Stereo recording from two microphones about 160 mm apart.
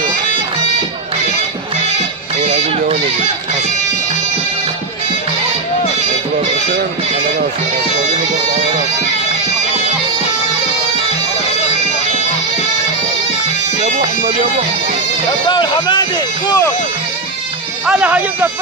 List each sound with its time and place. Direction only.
2.4 s music: 40° right (ahead or behind)
13.8 s bagpipes: 50° right (ahead or behind)
15.4 s speech: 25° left (ahead or behind)
17.8 s speech: 5° right (ahead or behind)